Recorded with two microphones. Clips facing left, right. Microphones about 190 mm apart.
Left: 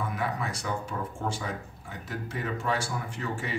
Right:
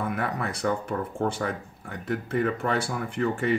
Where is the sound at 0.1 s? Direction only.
60° right (ahead or behind).